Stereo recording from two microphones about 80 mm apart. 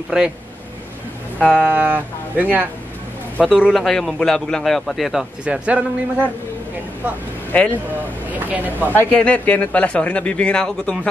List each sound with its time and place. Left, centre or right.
1.4 s speech: centre
1.7 s speech: right
3.4 s a man's voice: centre
5.4 s a man's voice: centre
7.5 s speech: centre
8.3 s speech: right
9.1 s speech: centre